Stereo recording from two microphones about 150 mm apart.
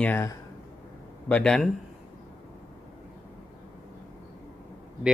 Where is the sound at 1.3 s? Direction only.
5° left (ahead or behind).